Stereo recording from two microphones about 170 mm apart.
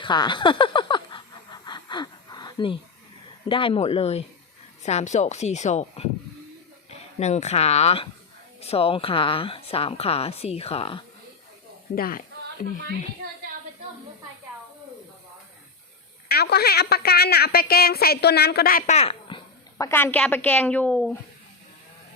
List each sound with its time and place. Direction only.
0.0 s speech: 25° left (ahead or behind)
1.6 s a sound: 25° left (ahead or behind)
3.5 s a woman's voice: 30° left (ahead or behind)
7.2 s a woman's voice: 40° left (ahead or behind)
11.9 s speech: 60° left (ahead or behind)
16.3 s a woman's voice: 70° left (ahead or behind)
18.9 s a sound: 35° left (ahead or behind)
19.8 s a woman's voice: 15° left (ahead or behind)